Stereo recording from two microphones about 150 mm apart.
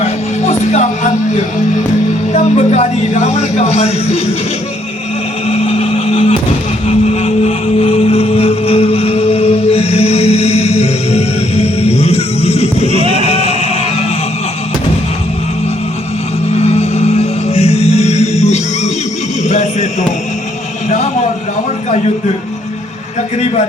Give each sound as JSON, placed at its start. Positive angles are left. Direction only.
{"t": 0.6, "sound": "speech", "side_deg": 50}
{"t": 5.5, "sound": "vehicle", "side_deg": 45}
{"t": 6.8, "sound": "a sound", "side_deg": 45}
{"t": 13.3, "sound": "music", "side_deg": 40}
{"t": 16.6, "sound": "music", "side_deg": 45}